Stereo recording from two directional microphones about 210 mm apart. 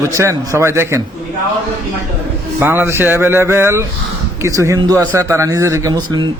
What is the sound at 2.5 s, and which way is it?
A man's voice, 10° right (ahead or behind).